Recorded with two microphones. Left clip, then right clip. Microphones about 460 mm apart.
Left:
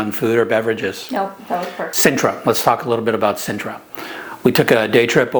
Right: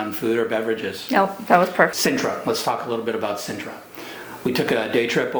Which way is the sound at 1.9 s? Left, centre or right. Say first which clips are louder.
Left 6 dB; left.